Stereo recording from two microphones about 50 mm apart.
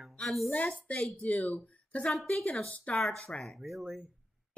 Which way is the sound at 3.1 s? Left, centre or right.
Centre.